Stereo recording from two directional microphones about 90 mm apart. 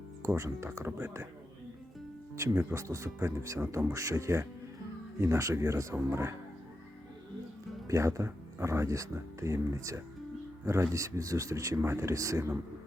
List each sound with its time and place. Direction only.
0.3 s speech: 30° right (ahead or behind)
2.3 s speech: 30° right (ahead or behind)
7.9 s speech: 35° right (ahead or behind)